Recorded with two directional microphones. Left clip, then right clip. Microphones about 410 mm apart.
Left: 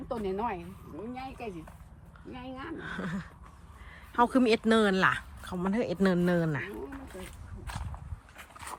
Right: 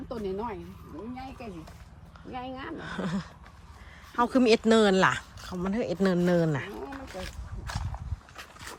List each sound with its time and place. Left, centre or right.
0.1 s speech: left
2.3 s speech: centre